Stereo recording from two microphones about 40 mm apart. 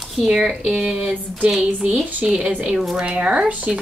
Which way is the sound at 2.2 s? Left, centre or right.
Right.